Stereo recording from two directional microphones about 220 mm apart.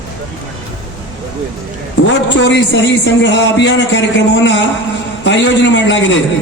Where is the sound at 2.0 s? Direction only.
55° left (ahead or behind).